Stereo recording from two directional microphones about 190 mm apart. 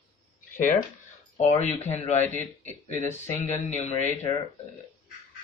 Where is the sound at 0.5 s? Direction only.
45° left (ahead or behind).